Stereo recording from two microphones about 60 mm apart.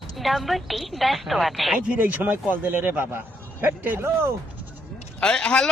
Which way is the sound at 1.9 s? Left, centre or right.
Right.